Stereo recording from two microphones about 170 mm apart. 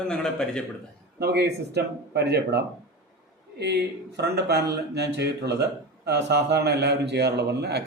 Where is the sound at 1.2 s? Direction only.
75° right (ahead or behind).